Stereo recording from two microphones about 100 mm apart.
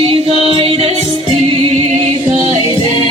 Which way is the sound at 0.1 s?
75° right (ahead or behind).